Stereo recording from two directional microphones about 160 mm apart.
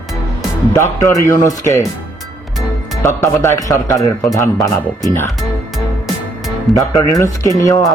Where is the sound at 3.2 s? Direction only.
15° left (ahead or behind).